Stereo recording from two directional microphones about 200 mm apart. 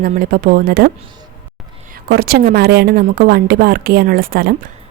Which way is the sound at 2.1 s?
50° right (ahead or behind).